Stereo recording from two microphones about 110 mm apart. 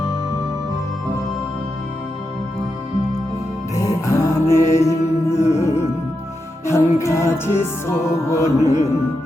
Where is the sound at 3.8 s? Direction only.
30° left (ahead or behind).